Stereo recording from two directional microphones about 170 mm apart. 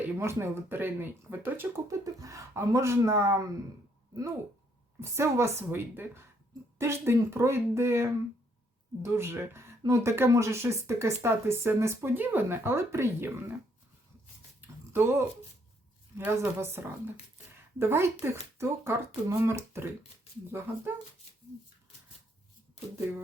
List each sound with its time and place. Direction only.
0.2 s speech: 15° right (ahead or behind)
4.9 s speech: 15° right (ahead or behind)
14.9 s speech: 15° right (ahead or behind)